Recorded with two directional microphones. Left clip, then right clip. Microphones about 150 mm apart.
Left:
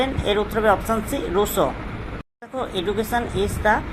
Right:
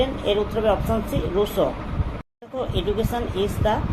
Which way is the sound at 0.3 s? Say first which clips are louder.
Left 3 dB; 25° left (ahead or behind).